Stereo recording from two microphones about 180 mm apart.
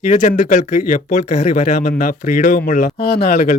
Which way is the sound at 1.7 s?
55° left (ahead or behind).